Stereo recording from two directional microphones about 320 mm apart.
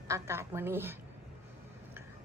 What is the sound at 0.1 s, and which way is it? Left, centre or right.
Speech, centre.